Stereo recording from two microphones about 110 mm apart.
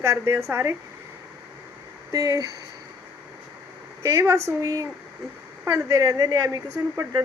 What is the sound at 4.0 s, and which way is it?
Speech, 30° right (ahead or behind).